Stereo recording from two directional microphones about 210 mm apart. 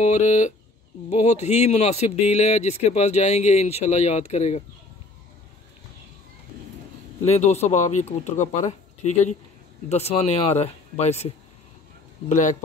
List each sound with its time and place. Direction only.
0.0 s a man's voice: 35° left (ahead or behind)
7.2 s a man's voice: 30° left (ahead or behind)
12.3 s a man's voice: 35° left (ahead or behind)